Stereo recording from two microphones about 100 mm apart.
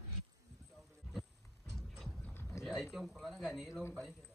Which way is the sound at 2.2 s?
15° left (ahead or behind).